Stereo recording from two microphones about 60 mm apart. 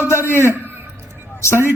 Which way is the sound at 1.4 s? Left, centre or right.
Left.